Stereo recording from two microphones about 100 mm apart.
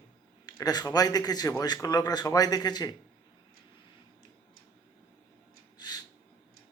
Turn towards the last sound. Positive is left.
turn(degrees=45)  # may be behind; listen again after turning